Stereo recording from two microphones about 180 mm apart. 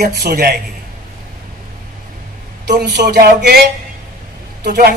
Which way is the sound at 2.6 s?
65° right (ahead or behind).